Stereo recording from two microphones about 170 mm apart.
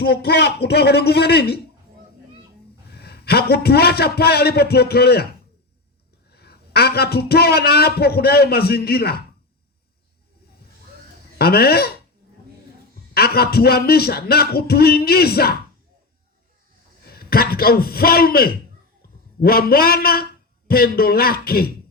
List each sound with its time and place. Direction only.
0.0 s a man's voice: 65° left (ahead or behind)
2.9 s a man's voice: 70° left (ahead or behind)
6.3 s a man's voice: 70° left (ahead or behind)
11.3 s a man's voice: 65° left (ahead or behind)
13.1 s a man's voice: 65° left (ahead or behind)
17.1 s a man's voice: 65° left (ahead or behind)